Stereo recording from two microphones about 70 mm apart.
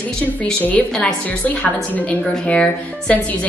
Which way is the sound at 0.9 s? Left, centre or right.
Centre.